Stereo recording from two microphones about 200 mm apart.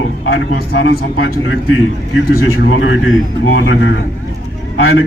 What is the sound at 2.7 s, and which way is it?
A man's voice, 75° left (ahead or behind).